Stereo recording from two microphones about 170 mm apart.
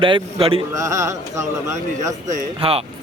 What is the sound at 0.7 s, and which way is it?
Speech, 20° right (ahead or behind).